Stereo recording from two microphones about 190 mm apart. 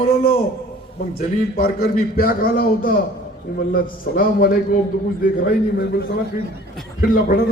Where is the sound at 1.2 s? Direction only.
50° left (ahead or behind).